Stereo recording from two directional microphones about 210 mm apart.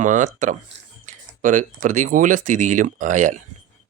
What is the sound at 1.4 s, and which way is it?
Speech, 35° right (ahead or behind).